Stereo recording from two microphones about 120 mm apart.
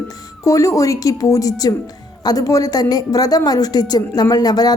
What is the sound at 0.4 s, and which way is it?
A woman's voice, 30° left (ahead or behind).